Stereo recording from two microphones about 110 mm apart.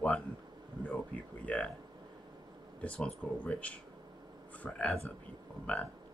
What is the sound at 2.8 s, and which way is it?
Speech, 10° left (ahead or behind).